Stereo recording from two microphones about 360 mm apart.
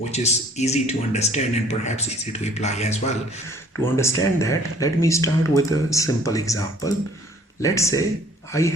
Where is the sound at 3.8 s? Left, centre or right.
Centre.